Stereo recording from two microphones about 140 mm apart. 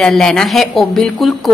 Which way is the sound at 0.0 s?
5° left (ahead or behind).